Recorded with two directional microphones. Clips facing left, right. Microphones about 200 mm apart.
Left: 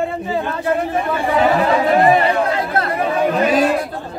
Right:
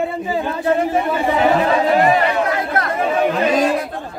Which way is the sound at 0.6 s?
25° right (ahead or behind).